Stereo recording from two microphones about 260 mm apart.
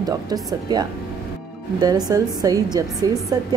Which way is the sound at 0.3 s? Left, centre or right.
Centre.